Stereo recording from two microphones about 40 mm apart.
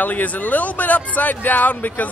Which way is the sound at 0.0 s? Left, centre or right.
Left.